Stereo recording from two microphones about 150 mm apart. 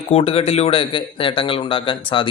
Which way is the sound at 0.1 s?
40° left (ahead or behind).